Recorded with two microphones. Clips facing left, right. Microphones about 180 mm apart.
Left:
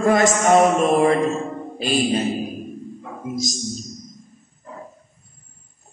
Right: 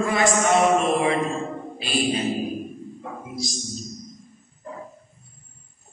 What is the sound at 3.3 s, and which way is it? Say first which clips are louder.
Mantra: left 6 dB; 45° left (ahead or behind).